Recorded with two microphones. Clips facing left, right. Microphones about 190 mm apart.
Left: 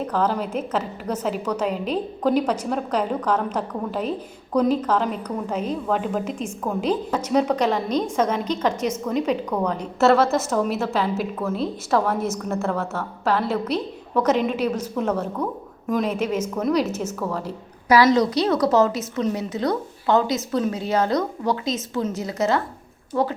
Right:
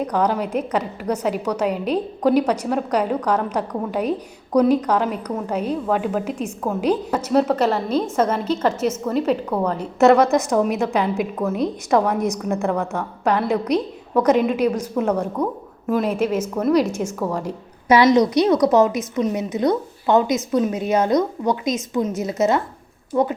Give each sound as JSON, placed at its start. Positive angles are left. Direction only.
{"t": 0.0, "sound": "a woman's voice", "side_deg": -15}